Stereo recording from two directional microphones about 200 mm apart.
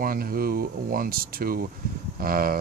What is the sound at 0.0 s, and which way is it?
Speech, 45° right (ahead or behind).